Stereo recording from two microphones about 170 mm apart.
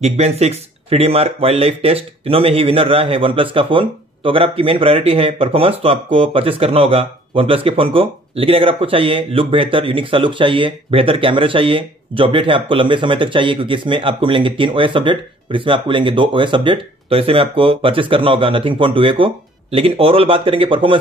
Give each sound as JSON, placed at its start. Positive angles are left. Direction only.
{"t": 0.0, "sound": "speech", "side_deg": -40}